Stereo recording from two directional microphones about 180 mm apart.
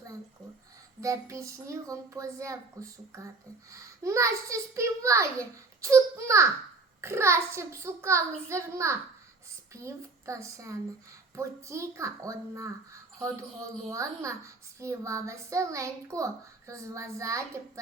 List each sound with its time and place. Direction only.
1.0 s a child's voice: 15° right (ahead or behind)